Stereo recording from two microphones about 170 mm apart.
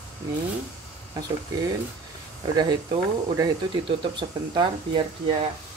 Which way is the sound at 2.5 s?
25° right (ahead or behind).